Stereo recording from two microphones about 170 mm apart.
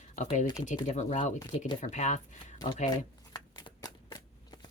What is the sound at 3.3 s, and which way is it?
Shuffling cards, 20° left (ahead or behind).